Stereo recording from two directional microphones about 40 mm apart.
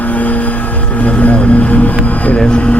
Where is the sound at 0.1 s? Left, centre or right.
Left.